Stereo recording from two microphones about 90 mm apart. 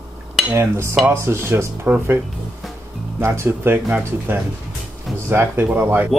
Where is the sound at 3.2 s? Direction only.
30° right (ahead or behind).